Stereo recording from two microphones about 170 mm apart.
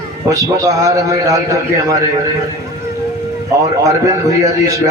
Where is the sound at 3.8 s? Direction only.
20° right (ahead or behind).